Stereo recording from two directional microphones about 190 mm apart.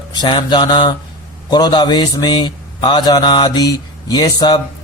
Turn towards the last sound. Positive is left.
turn(degrees=20)  # may be behind; listen again after turning